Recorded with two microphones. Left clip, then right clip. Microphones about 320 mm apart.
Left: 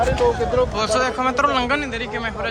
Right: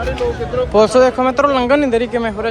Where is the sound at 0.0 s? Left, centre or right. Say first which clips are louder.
Left 1 dB; left.